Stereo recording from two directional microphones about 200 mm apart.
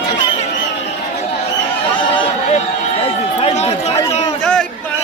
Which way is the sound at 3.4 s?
30° left (ahead or behind).